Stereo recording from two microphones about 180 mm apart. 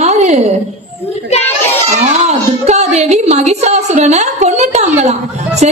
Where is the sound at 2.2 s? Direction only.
40° right (ahead or behind).